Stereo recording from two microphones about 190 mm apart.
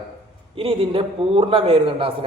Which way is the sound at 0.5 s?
30° right (ahead or behind).